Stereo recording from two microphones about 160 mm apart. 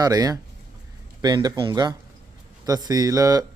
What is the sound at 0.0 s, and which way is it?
A man's voice, 25° right (ahead or behind).